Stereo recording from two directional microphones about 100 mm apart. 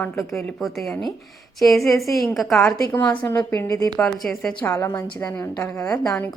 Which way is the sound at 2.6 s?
15° left (ahead or behind).